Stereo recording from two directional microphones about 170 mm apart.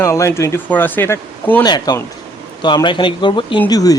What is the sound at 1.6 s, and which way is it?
Speech, 25° left (ahead or behind).